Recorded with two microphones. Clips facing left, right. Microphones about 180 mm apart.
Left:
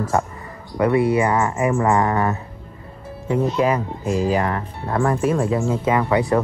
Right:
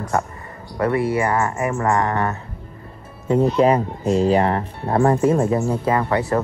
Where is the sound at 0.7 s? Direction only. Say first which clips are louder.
Left 2 dB; 20° left (ahead or behind).